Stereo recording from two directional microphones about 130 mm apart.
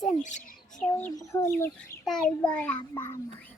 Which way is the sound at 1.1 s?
25° left (ahead or behind).